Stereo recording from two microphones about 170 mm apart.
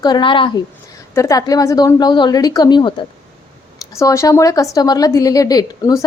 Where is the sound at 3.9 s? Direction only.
15° left (ahead or behind).